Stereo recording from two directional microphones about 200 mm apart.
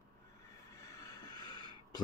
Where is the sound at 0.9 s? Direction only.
20° left (ahead or behind).